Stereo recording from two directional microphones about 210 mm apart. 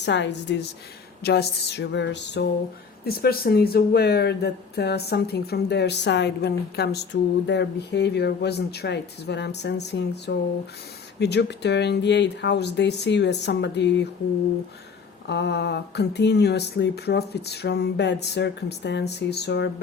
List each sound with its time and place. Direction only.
0.0 s speech: 55° left (ahead or behind)
15.3 s speech: 55° left (ahead or behind)